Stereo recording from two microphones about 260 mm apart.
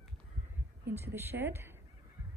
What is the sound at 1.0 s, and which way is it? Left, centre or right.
Speech, centre.